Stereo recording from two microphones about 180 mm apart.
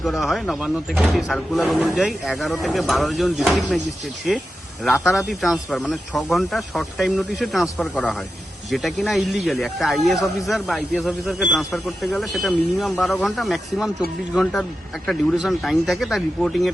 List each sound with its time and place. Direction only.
0.0 s speech: centre (ahead or behind)
5.3 s speech: centre (ahead or behind)